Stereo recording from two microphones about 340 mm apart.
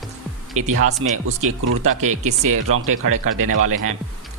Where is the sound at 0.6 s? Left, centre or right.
Right.